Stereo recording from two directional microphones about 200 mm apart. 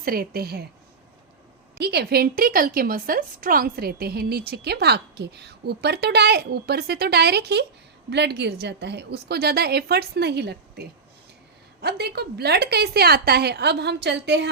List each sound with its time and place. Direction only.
0.0 s a woman's voice: 45° right (ahead or behind)
1.8 s a woman's voice: 55° right (ahead or behind)